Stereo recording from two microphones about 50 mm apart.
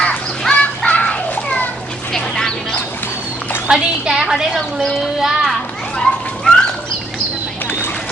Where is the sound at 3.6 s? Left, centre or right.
Centre.